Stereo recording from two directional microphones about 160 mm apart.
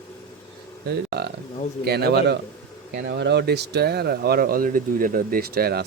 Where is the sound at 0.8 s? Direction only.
90° right.